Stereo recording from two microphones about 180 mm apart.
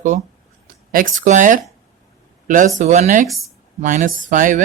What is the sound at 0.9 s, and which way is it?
Speech, 45° right (ahead or behind).